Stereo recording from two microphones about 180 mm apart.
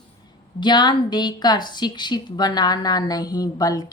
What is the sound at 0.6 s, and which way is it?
A woman's voice, 25° left (ahead or behind).